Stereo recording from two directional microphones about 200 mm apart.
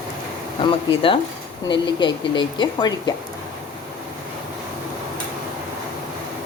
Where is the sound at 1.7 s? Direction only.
25° left (ahead or behind).